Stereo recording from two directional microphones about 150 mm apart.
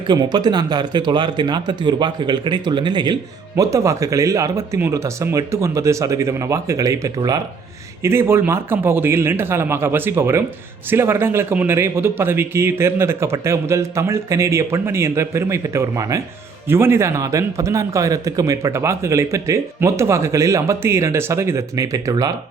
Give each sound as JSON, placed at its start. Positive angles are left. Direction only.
{"t": 0.1, "sound": "a man's voice", "side_deg": -30}